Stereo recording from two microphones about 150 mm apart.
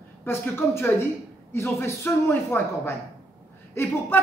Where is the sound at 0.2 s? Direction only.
15° left (ahead or behind).